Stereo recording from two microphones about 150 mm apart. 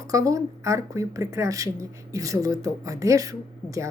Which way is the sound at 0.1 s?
20° right (ahead or behind).